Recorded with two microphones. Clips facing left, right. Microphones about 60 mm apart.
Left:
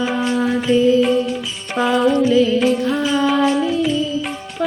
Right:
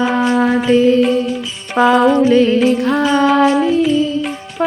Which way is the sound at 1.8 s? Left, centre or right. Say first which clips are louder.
Right 5 dB; right.